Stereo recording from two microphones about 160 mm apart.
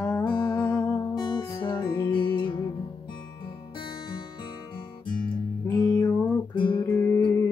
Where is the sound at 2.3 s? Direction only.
30° left (ahead or behind).